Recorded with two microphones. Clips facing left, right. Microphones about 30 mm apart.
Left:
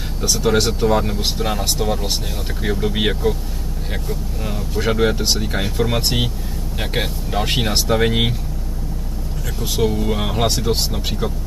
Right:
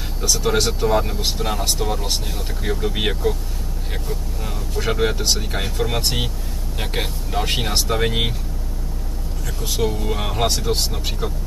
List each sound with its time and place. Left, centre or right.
0.2 s speech: centre
9.6 s speech: centre